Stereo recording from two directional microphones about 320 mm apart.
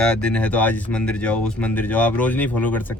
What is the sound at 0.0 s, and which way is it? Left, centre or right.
Speech, centre.